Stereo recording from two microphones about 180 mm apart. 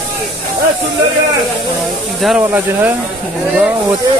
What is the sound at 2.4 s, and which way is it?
Speech, 10° right (ahead or behind).